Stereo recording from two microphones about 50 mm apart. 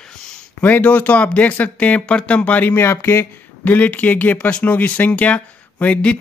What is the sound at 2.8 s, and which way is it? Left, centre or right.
Speech, left.